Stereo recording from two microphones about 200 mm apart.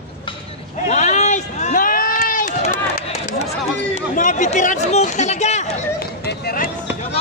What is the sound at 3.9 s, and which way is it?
Chatter, 40° left (ahead or behind).